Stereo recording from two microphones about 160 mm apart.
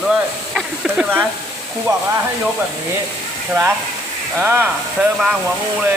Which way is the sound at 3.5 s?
15° right (ahead or behind).